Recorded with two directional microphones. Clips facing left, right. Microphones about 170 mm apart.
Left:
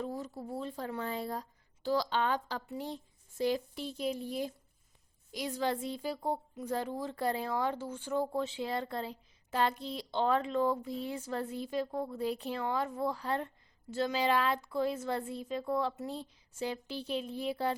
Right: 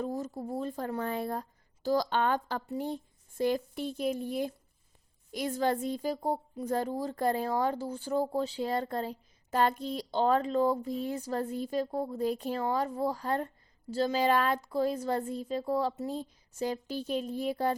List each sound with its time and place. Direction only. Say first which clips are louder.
0.0 s speech: right 4 dB; 45° right (ahead or behind)